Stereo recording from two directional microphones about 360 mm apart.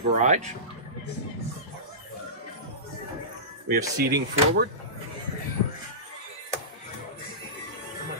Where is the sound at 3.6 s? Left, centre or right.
Right.